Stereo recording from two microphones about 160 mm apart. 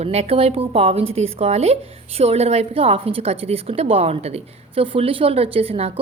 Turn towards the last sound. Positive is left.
turn(degrees=-40)  # may be behind; listen again after turning